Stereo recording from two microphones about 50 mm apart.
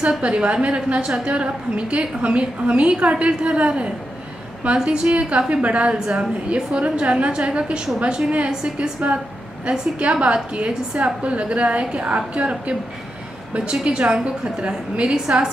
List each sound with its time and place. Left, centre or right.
0.2 s a woman's voice: right